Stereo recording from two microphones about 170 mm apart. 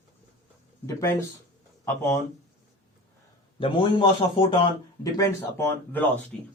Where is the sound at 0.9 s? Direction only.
20° left (ahead or behind).